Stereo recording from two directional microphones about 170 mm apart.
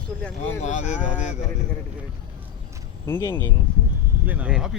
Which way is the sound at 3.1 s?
15° left (ahead or behind).